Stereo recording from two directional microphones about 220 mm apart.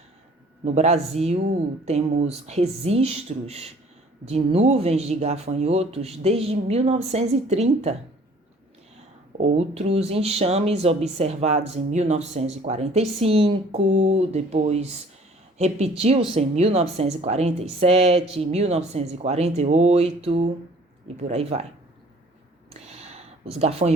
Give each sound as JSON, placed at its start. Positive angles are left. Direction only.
{"t": 0.6, "sound": "speech", "side_deg": -30}
{"t": 9.4, "sound": "speech", "side_deg": -30}
{"t": 22.7, "sound": "a sound", "side_deg": -30}